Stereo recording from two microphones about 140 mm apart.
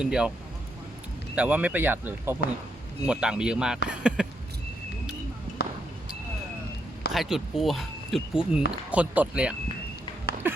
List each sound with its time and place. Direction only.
0.0 s speech: 5° right (ahead or behind)
1.4 s speech: 10° right (ahead or behind)
7.1 s speech: centre (ahead or behind)
10.4 s a sound: 15° right (ahead or behind)